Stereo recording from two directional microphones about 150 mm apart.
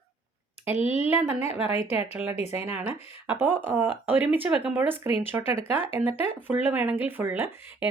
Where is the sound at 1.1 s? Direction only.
15° right (ahead or behind).